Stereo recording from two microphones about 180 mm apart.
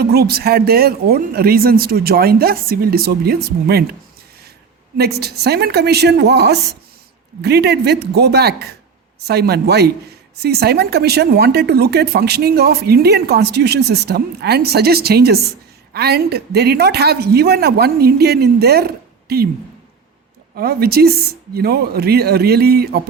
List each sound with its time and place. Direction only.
0.0 s speech: 60° right (ahead or behind)
5.2 s speech: 65° right (ahead or behind)
20.6 s speech: 60° right (ahead or behind)